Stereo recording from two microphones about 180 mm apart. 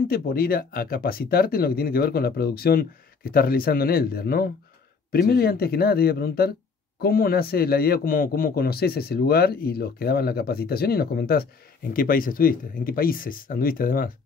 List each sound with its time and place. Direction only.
0.1 s a man's voice: 55° left (ahead or behind)